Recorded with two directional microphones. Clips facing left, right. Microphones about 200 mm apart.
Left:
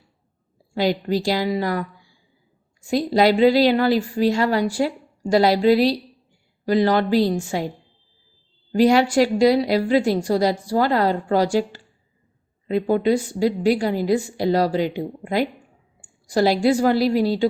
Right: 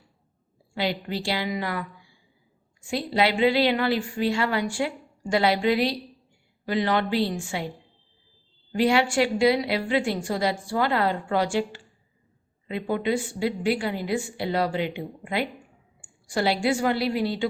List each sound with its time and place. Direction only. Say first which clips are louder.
0.7 s a woman's voice: left 7 dB; 40° left (ahead or behind)
8.7 s a woman's voice: left 6 dB; 40° left (ahead or behind)